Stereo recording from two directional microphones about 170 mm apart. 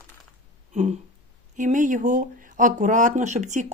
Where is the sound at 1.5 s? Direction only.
50° right (ahead or behind).